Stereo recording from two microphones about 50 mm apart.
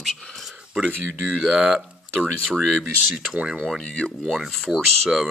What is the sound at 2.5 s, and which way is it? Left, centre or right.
Speech, centre.